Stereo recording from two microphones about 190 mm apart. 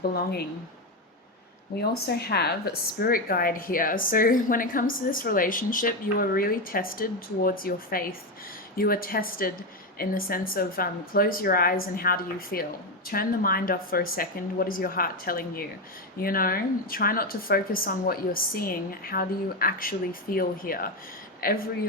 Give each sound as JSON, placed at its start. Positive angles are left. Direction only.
{"t": 0.1, "sound": "speech", "side_deg": 55}
{"t": 1.8, "sound": "a woman's voice", "side_deg": 55}